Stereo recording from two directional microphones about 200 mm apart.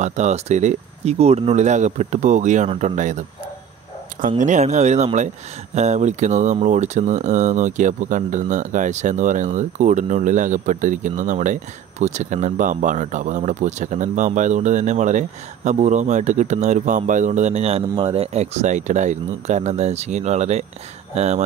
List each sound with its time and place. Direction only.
0.0 s speech: 35° right (ahead or behind)
4.4 s speech: 35° right (ahead or behind)